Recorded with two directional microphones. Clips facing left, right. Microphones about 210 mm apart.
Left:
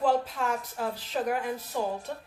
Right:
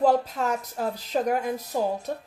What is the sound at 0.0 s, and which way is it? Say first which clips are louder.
A woman's voice: right 4 dB; 40° right (ahead or behind).